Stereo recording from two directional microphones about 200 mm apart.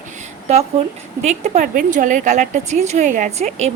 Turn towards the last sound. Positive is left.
turn(degrees=-35)  # may be behind; listen again after turning